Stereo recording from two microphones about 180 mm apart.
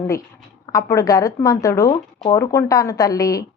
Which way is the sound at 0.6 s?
20° left (ahead or behind).